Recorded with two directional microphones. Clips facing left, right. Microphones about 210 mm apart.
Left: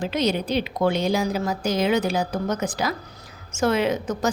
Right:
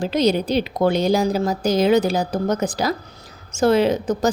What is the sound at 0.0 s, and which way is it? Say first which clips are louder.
A woman's voice: right 5 dB; 35° right (ahead or behind).